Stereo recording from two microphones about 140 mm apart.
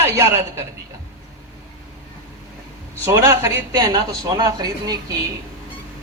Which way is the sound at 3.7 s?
30° right (ahead or behind).